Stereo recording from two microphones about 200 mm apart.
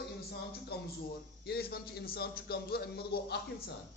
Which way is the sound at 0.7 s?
50° left (ahead or behind).